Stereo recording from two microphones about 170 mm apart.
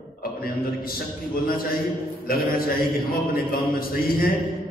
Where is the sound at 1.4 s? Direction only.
60° left (ahead or behind).